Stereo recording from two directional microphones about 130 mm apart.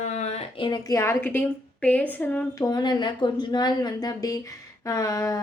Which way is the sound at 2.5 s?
25° left (ahead or behind).